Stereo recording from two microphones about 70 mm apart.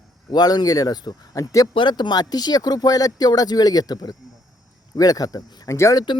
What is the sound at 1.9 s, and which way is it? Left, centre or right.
Speech, left.